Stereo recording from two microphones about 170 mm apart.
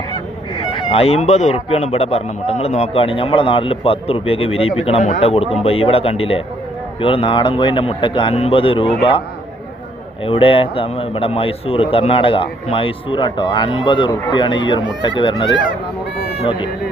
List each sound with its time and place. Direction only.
0.8 s a man's voice: 35° left (ahead or behind)
10.2 s a man's voice: 30° left (ahead or behind)